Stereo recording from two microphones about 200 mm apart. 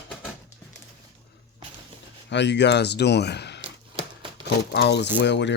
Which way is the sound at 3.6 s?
25° right (ahead or behind).